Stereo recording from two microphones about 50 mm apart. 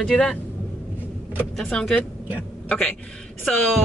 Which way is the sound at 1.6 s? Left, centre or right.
Centre.